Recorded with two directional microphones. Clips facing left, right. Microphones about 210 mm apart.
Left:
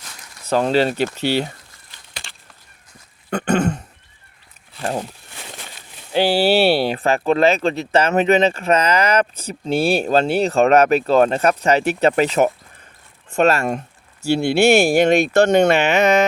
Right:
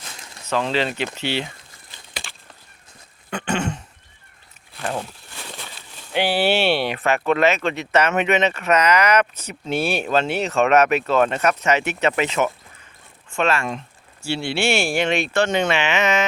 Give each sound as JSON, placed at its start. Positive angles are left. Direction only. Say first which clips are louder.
{"t": 0.5, "sound": "speech", "louder": "left 5 dB", "side_deg": 40}
{"t": 3.5, "sound": "speech", "louder": "left 6 dB", "side_deg": 40}
{"t": 6.1, "sound": "speech", "louder": "left 4 dB", "side_deg": 30}